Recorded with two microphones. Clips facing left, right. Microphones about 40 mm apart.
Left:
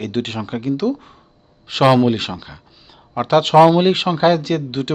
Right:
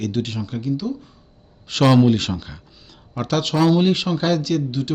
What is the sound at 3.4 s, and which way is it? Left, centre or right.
Speech, left.